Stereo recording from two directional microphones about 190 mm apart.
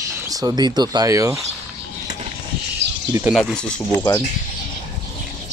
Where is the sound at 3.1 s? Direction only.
15° right (ahead or behind).